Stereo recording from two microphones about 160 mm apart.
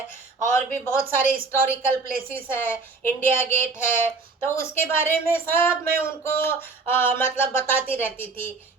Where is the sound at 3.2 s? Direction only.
15° left (ahead or behind).